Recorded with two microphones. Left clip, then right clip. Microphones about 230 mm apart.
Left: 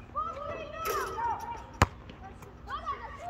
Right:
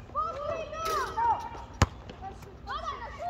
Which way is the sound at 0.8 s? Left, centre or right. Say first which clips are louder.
Right 3 dB; centre.